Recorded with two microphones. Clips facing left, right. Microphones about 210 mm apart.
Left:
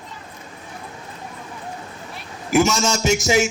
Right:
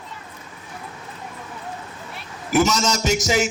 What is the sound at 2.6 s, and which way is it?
Speech, 25° left (ahead or behind).